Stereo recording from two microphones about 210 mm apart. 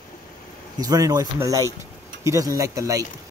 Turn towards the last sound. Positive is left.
turn(degrees=-15)  # may be behind; listen again after turning